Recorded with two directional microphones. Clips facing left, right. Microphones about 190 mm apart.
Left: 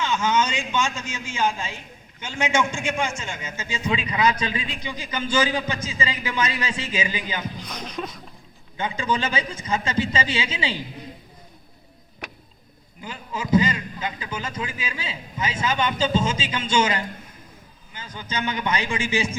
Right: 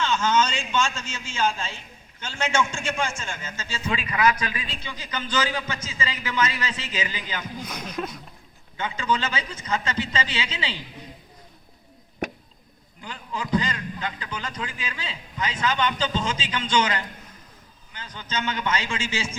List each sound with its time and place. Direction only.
0.0 s a man's voice: 15° left (ahead or behind)
7.6 s speech: 5° right (ahead or behind)
8.8 s a man's voice: 15° left (ahead or behind)
13.0 s a sound: 5° left (ahead or behind)
13.5 s a man's voice: 10° left (ahead or behind)